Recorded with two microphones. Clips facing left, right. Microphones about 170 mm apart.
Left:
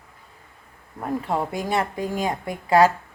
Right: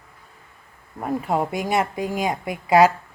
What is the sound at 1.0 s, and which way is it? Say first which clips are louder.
Speech: right 2 dB; 10° right (ahead or behind).